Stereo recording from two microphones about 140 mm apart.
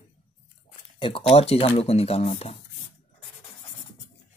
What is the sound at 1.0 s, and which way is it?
Speech, 40° left (ahead or behind).